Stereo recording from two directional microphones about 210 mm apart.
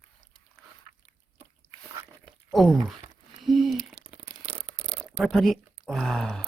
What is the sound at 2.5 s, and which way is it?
Speech, centre (ahead or behind).